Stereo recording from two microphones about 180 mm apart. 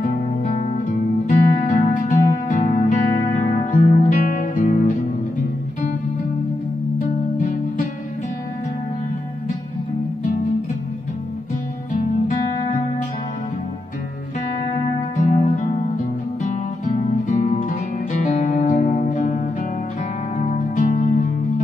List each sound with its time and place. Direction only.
0.0 s music: 45° left (ahead or behind)
7.3 s music: 50° left (ahead or behind)
15.1 s music: 40° left (ahead or behind)